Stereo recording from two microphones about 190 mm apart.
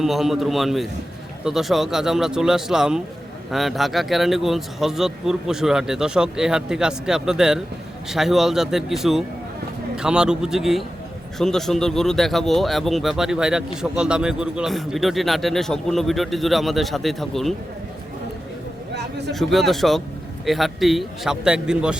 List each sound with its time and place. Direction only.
0.0 s speech: centre (ahead or behind)
19.3 s speech: centre (ahead or behind)